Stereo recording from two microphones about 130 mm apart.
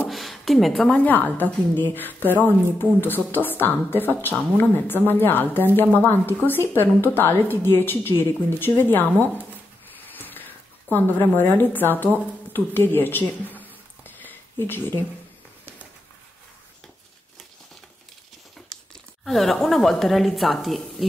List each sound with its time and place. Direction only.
0.1 s a woman's voice: centre (ahead or behind)
10.1 s a sound: 15° left (ahead or behind)
19.2 s speech: centre (ahead or behind)